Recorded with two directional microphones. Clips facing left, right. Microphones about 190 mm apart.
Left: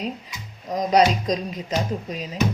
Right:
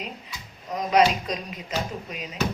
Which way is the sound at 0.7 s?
35° left (ahead or behind).